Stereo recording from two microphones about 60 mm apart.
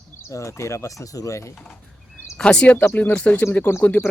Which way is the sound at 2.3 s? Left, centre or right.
Centre.